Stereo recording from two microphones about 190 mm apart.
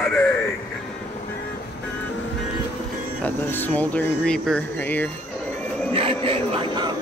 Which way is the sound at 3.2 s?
10° left (ahead or behind).